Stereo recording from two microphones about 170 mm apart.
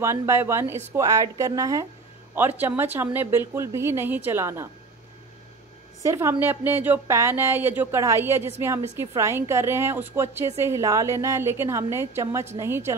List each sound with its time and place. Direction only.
0.0 s speech: 15° right (ahead or behind)
6.0 s speech: 15° right (ahead or behind)